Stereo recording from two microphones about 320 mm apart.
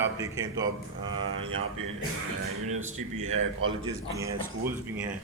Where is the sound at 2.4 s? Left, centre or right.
Right.